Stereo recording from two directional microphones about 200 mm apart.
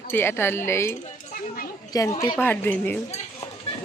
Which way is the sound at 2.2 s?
10° left (ahead or behind).